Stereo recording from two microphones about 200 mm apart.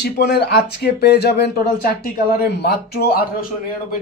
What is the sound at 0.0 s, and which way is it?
A man's voice, 55° left (ahead or behind).